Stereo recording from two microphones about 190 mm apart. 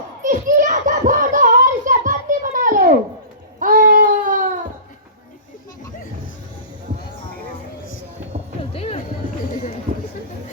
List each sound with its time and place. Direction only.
0.2 s a sound: 40° right (ahead or behind)
3.6 s baby cry: 45° right (ahead or behind)
8.7 s music: 30° left (ahead or behind)